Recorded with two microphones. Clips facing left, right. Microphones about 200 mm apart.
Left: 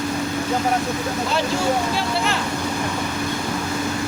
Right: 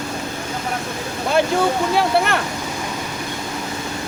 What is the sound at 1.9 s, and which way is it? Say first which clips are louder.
Speech: right 5 dB; 60° right (ahead or behind).